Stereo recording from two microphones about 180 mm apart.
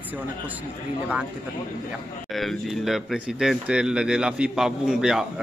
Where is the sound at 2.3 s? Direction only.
Centre (ahead or behind).